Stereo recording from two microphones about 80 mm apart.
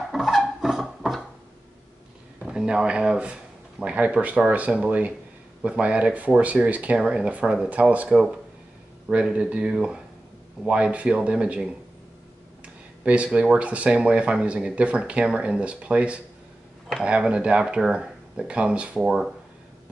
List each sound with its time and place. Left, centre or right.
0.1 s a sound: centre
2.4 s speech: centre
12.6 s speech: centre